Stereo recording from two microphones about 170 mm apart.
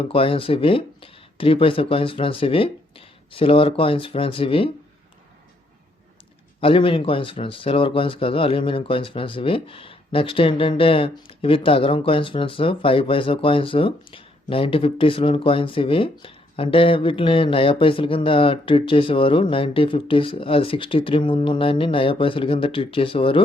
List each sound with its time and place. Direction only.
0.0 s speech: 30° left (ahead or behind)
6.6 s speech: 30° left (ahead or behind)